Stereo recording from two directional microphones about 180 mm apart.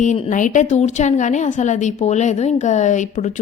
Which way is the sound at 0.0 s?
40° left (ahead or behind).